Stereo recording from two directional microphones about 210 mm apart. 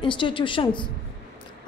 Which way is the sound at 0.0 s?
25° left (ahead or behind).